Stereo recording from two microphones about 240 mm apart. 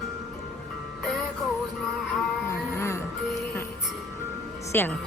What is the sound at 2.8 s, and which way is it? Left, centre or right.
Music, centre.